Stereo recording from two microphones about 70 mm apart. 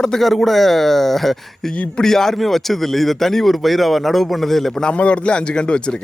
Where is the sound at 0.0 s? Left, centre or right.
Centre.